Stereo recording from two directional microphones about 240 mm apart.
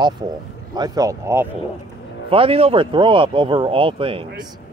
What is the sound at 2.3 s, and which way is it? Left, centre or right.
Speech, right.